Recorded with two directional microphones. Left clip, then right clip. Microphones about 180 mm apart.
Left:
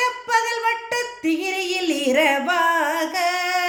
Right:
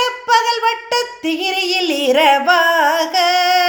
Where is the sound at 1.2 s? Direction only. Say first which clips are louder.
Right 3 dB; 50° right (ahead or behind).